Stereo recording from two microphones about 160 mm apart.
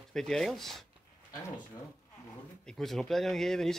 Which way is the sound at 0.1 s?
5° left (ahead or behind).